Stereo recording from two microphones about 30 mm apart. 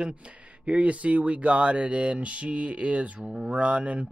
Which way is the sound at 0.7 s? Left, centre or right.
Right.